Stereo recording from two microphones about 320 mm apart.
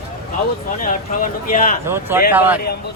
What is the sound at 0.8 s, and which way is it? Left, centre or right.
Speech, left.